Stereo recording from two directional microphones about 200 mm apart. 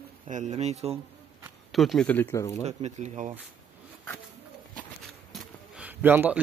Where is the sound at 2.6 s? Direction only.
35° right (ahead or behind).